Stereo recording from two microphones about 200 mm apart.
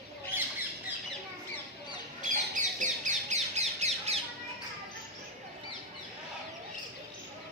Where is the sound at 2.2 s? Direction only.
40° right (ahead or behind).